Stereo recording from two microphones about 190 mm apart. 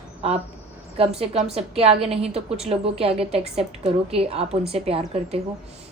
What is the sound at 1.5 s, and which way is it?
A woman's voice, 30° right (ahead or behind).